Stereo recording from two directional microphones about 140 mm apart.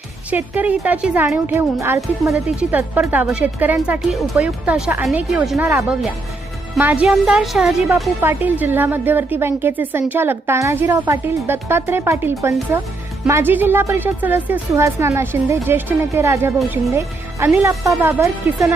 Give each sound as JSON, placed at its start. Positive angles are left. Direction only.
{"t": 0.3, "sound": "a woman's voice", "side_deg": -10}
{"t": 8.2, "sound": "a woman's voice", "side_deg": -15}